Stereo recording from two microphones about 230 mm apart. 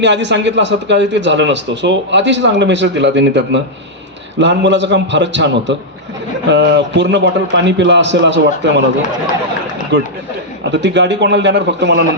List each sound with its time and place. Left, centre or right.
0.0 s a man's voice: right
9.9 s a man's voice: right